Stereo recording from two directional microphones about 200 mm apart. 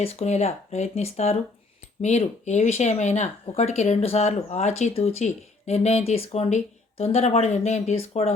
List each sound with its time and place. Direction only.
0.0 s speech: 30° left (ahead or behind)